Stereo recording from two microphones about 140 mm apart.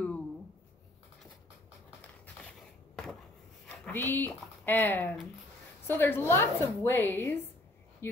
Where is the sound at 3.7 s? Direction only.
15° left (ahead or behind).